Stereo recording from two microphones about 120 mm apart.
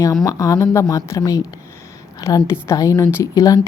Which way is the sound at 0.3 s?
25° left (ahead or behind).